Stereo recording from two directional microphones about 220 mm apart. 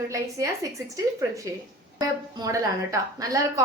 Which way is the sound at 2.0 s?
15° right (ahead or behind).